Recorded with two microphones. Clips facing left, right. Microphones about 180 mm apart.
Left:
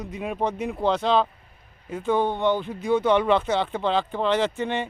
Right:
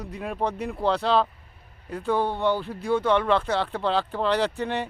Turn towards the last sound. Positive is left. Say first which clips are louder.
# left 1 dB
turn(degrees=0)  # may be behind; listen again after turning